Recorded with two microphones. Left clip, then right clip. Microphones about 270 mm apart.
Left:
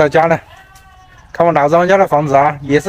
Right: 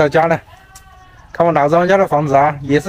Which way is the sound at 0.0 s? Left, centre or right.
Centre.